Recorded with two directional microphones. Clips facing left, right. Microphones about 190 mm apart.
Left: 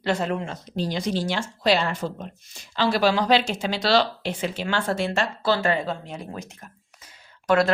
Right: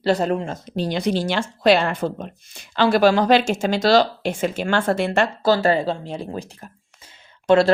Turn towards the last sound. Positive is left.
turn(degrees=-30)  # may be behind; listen again after turning